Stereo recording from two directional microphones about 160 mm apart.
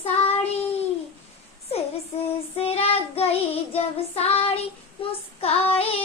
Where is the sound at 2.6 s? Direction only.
40° left (ahead or behind).